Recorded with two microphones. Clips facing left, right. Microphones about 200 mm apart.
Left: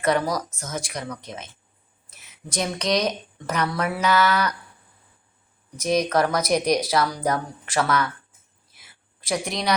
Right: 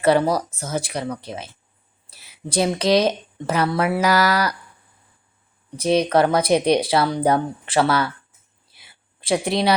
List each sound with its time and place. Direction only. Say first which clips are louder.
0.0 s speech: right 5 dB; 30° right (ahead or behind)
5.7 s speech: right 4 dB; 30° right (ahead or behind)
8.7 s a sound: right 1 dB; 30° right (ahead or behind)